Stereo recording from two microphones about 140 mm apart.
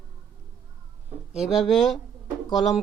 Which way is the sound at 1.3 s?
Centre (ahead or behind).